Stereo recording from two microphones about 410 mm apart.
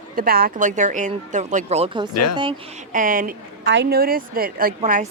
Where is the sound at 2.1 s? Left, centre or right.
Left.